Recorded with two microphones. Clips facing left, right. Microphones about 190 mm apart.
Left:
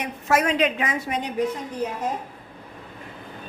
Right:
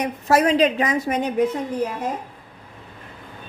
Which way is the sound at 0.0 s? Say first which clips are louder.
Right 4 dB; 35° right (ahead or behind).